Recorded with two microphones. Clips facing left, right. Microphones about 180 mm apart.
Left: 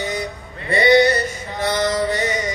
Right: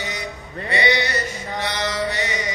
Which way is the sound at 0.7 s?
45° left (ahead or behind).